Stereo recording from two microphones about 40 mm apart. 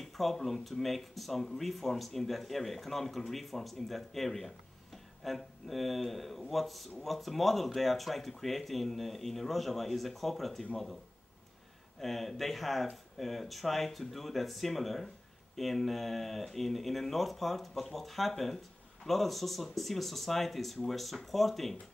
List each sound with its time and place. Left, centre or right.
0.0 s speech: centre
12.0 s speech: centre